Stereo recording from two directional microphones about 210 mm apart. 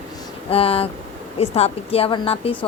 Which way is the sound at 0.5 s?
25° left (ahead or behind).